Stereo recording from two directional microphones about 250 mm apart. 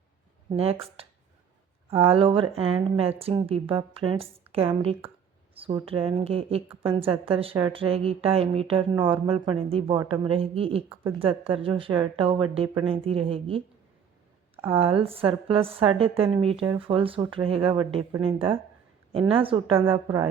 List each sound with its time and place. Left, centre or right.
0.5 s a woman's voice: right
10.8 s speech: centre
11.2 s a woman's voice: right
14.8 s a woman's voice: right